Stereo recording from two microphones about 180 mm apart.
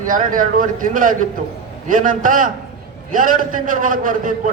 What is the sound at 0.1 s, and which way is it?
A man's voice, 50° right (ahead or behind).